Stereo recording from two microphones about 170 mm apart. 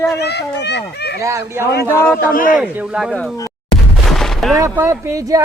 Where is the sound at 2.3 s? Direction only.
55° left (ahead or behind).